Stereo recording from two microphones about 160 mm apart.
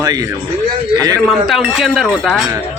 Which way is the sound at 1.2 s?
Centre (ahead or behind).